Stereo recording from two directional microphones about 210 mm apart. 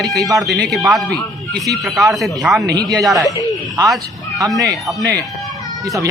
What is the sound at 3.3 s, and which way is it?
Speech, 15° right (ahead or behind).